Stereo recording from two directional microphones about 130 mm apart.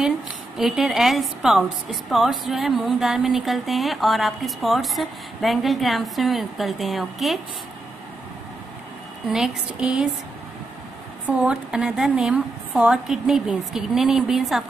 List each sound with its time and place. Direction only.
0.6 s a woman's voice: centre (ahead or behind)
9.3 s speech: 5° right (ahead or behind)
11.2 s a woman's voice: 10° right (ahead or behind)